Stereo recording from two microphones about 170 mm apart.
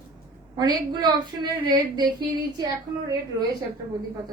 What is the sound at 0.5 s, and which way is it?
A woman's voice, 25° right (ahead or behind).